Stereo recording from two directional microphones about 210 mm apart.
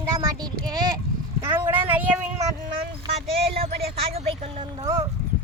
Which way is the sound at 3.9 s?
30° right (ahead or behind).